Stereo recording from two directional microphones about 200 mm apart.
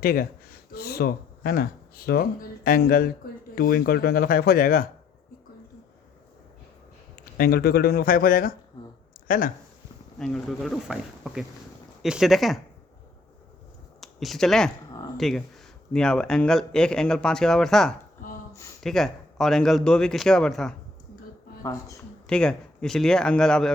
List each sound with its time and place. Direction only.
0.0 s speech: 45° left (ahead or behind)
7.3 s speech: 50° left (ahead or behind)
10.2 s speech: centre (ahead or behind)
14.0 s speech: centre (ahead or behind)
21.6 s speech: 15° left (ahead or behind)
22.3 s speech: 5° left (ahead or behind)